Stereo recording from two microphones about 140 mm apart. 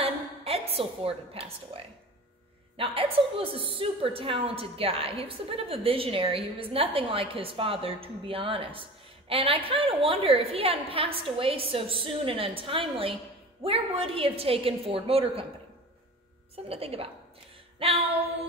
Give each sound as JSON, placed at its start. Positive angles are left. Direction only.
{"t": 0.0, "sound": "a sound", "side_deg": -45}
{"t": 2.8, "sound": "a woman's voice", "side_deg": -40}
{"t": 16.5, "sound": "a woman's voice", "side_deg": -45}